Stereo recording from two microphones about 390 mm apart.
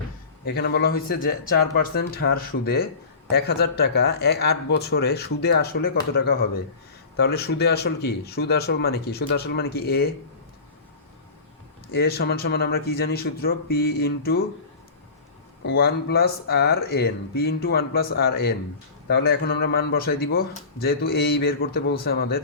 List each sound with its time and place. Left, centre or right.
0.4 s speech: left
11.9 s speech: left
15.6 s speech: left